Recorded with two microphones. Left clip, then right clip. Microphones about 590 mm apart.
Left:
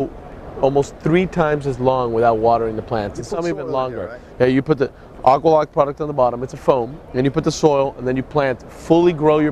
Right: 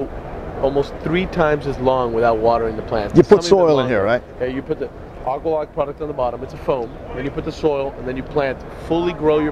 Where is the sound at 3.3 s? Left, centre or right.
Right.